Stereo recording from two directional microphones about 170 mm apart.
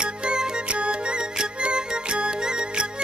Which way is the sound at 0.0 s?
5° right (ahead or behind).